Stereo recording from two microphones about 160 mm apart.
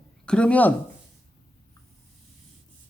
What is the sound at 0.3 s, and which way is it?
Speech, 5° left (ahead or behind).